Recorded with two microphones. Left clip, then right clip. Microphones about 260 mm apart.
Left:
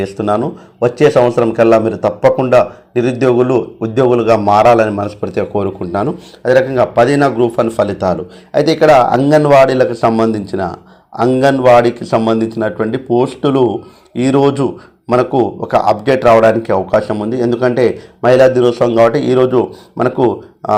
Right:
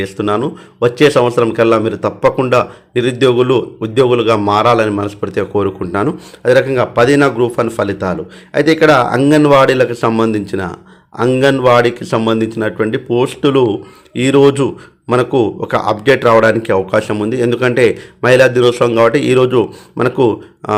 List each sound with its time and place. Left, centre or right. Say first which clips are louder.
0.0 s a man's voice: left 1 dB; centre